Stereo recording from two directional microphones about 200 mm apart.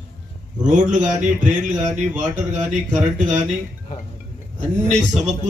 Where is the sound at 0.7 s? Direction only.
40° right (ahead or behind).